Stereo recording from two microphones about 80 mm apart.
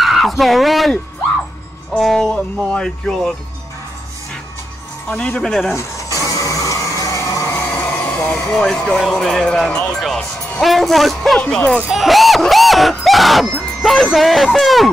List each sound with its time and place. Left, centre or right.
0.0 s speech: centre
5.4 s speech: centre
5.8 s a sound: left
7.4 s music: left
7.8 s vehicle: left
8.5 s speech: centre
11.3 s speech: centre
11.9 s a sound: centre